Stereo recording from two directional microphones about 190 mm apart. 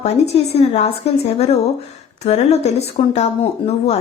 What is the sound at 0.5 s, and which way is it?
Speech, 35° left (ahead or behind).